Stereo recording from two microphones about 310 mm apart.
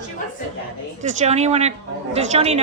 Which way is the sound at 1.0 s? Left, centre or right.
Right.